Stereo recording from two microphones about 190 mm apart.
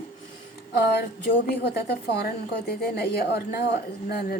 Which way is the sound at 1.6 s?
55° left (ahead or behind).